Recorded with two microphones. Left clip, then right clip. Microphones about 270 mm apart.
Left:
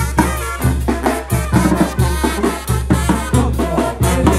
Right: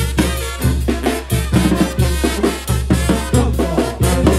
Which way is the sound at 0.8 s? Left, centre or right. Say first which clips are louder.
Left 2 dB; centre.